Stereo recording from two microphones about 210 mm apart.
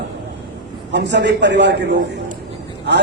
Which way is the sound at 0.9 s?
55° right (ahead or behind).